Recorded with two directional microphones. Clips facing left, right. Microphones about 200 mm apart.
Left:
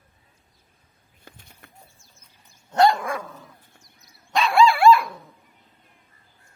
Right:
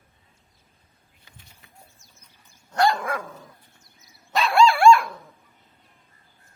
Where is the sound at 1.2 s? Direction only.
55° left (ahead or behind).